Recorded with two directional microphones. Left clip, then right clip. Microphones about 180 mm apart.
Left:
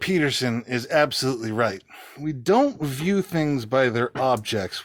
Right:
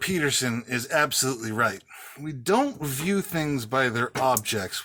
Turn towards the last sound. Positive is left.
turn(degrees=40)  # may be behind; listen again after turning